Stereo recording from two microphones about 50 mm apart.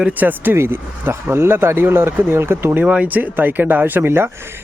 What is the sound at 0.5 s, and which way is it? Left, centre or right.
Speech, right.